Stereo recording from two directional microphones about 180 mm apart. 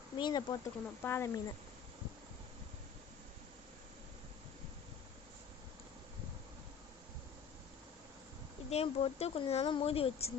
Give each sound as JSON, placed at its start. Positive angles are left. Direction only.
{"t": 0.2, "sound": "speech", "side_deg": 25}
{"t": 8.7, "sound": "speech", "side_deg": 35}